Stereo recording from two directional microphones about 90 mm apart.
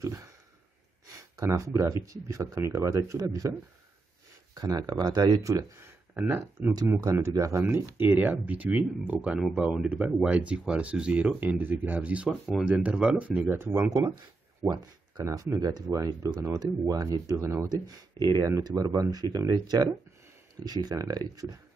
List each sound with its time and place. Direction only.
0.0 s a sound: 35° right (ahead or behind)
2.0 s speech: 35° right (ahead or behind)
4.6 s speech: 45° right (ahead or behind)
6.1 s speech: 20° right (ahead or behind)
7.0 s speech: 35° right (ahead or behind)
7.6 s speech: 20° right (ahead or behind)
9.4 s speech: 5° right (ahead or behind)
11.4 s speech: 25° right (ahead or behind)
13.9 s speech: 45° right (ahead or behind)
17.8 s speech: 45° right (ahead or behind)